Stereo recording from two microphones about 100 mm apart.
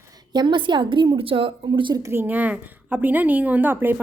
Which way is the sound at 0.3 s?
55° right (ahead or behind).